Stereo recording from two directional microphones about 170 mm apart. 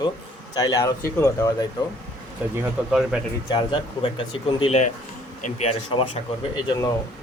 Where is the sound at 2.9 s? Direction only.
5° right (ahead or behind).